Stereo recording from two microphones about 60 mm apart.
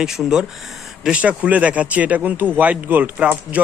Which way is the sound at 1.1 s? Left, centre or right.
Right.